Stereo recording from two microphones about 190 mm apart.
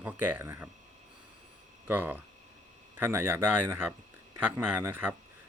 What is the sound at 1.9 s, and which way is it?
Speech, 10° right (ahead or behind).